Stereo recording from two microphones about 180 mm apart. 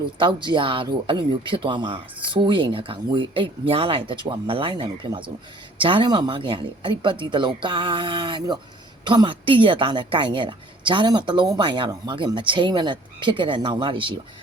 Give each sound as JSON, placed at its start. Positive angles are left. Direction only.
{"t": 0.2, "sound": "speech", "side_deg": -25}